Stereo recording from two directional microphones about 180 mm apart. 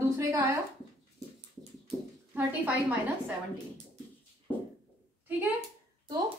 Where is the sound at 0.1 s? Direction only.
15° right (ahead or behind).